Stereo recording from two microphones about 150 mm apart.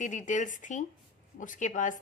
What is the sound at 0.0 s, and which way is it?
A woman's voice, 55° left (ahead or behind).